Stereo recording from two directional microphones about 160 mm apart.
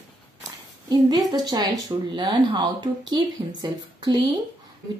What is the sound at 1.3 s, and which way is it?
A woman's voice, 25° right (ahead or behind).